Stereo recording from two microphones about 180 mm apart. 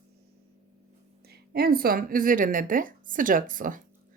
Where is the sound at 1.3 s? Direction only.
60° right (ahead or behind).